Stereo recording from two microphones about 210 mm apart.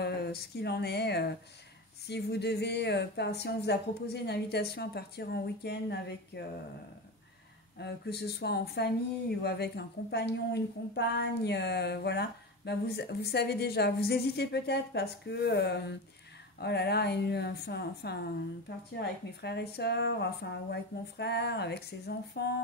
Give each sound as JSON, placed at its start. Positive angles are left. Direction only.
{"t": 0.0, "sound": "a woman's voice", "side_deg": 50}
{"t": 7.7, "sound": "a woman's voice", "side_deg": 50}